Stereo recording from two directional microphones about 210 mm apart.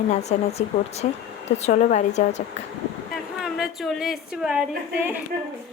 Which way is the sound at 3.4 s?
Centre (ahead or behind).